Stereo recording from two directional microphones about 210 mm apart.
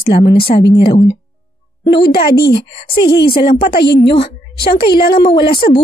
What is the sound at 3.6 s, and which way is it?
Speech, 50° left (ahead or behind).